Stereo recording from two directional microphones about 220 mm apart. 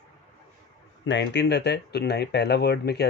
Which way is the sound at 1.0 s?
55° left (ahead or behind).